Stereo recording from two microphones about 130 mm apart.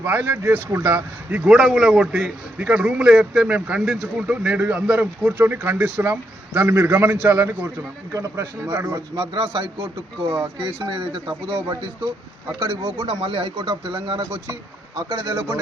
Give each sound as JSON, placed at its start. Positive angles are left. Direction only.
{"t": 0.0, "sound": "a man's voice", "side_deg": -15}
{"t": 1.5, "sound": "a man's voice", "side_deg": 0}
{"t": 9.3, "sound": "speech", "side_deg": -45}
{"t": 10.2, "sound": "speech", "side_deg": -20}
{"t": 10.6, "sound": "speech", "side_deg": -45}
{"t": 13.1, "sound": "speech", "side_deg": -45}
{"t": 14.9, "sound": "speech", "side_deg": -25}